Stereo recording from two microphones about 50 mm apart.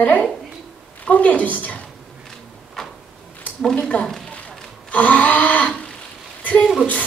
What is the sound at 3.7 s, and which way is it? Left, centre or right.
Speech, centre.